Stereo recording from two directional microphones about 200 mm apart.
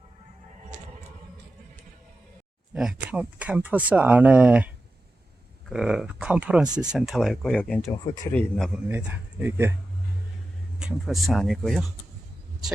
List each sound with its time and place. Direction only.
2.7 s a man's voice: 5° right (ahead or behind)
8.9 s speech: 10° right (ahead or behind)
10.8 s speech: centre (ahead or behind)